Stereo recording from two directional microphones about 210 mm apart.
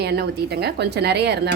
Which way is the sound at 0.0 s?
50° right (ahead or behind).